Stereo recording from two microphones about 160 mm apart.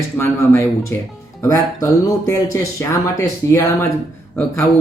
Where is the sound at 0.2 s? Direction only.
20° left (ahead or behind).